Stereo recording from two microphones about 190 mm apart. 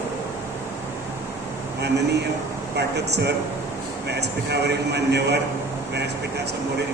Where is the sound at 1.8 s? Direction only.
60° right (ahead or behind).